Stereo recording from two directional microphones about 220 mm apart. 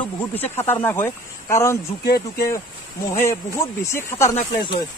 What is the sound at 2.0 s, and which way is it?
Speech, 45° left (ahead or behind).